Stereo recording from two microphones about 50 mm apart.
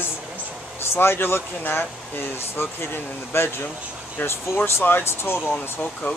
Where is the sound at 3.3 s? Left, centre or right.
Left.